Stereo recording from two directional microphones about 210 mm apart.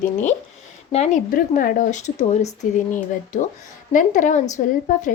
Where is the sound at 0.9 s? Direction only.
35° left (ahead or behind).